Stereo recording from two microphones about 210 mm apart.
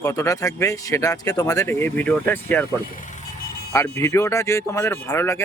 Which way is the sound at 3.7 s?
15° left (ahead or behind).